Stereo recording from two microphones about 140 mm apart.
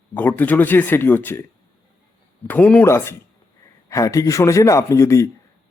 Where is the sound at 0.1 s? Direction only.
15° left (ahead or behind).